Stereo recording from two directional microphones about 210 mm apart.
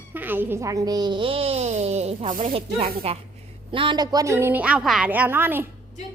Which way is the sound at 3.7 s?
25° right (ahead or behind).